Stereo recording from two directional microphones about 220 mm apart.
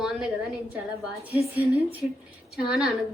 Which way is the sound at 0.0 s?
5° right (ahead or behind).